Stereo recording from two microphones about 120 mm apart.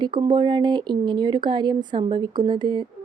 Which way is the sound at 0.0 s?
35° right (ahead or behind).